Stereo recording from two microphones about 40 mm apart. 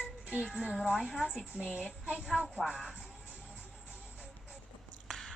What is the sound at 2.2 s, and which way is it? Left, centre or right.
Speech, centre.